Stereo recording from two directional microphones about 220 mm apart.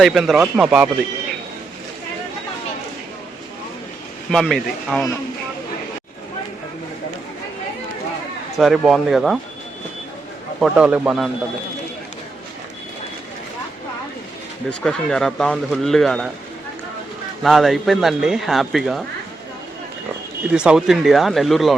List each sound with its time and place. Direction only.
0.0 s speech: centre (ahead or behind)
4.3 s speech: centre (ahead or behind)
8.5 s speech: centre (ahead or behind)
10.6 s speech: 5° right (ahead or behind)
14.7 s speech: 5° left (ahead or behind)
17.4 s speech: centre (ahead or behind)
20.5 s speech: 5° right (ahead or behind)